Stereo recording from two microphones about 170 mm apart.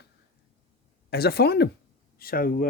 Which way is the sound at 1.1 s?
70° left (ahead or behind).